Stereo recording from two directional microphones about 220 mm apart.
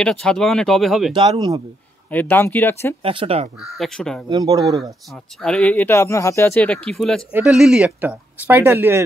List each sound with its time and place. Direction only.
0.0 s speech: 5° left (ahead or behind)
1.1 s speech: 25° right (ahead or behind)
2.0 s speech: 10° left (ahead or behind)
3.0 s speech: 25° right (ahead or behind)
3.7 s speech: centre (ahead or behind)
4.3 s speech: 15° right (ahead or behind)
5.4 s speech: 5° left (ahead or behind)